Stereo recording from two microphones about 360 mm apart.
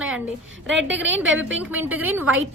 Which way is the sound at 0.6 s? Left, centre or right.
Right.